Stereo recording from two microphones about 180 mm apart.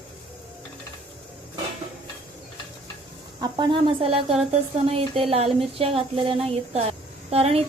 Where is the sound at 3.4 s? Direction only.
25° right (ahead or behind).